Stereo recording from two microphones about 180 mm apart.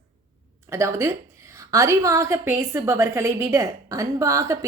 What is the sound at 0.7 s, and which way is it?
A woman's voice, 15° right (ahead or behind).